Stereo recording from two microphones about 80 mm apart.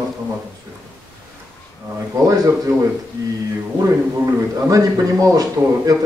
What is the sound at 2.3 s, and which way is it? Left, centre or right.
Speech, right.